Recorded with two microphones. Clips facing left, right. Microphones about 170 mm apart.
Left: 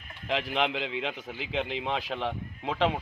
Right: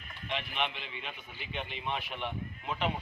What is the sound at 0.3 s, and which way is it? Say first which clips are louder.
A man's voice: left 7 dB; 90° left.